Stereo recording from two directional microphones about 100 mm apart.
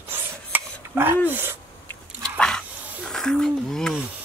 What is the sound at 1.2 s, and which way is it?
Speech, 20° right (ahead or behind).